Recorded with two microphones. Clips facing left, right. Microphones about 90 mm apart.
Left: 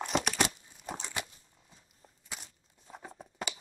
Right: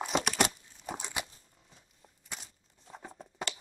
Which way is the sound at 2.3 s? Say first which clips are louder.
Even; 5° left (ahead or behind).